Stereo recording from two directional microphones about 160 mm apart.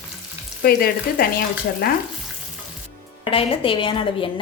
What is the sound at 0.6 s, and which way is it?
Speech, 70° left (ahead or behind).